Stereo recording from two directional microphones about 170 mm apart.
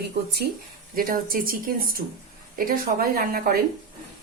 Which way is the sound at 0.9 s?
55° right (ahead or behind).